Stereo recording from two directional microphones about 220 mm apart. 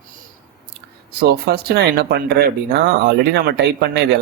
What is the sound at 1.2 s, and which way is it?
Speech, 45° right (ahead or behind).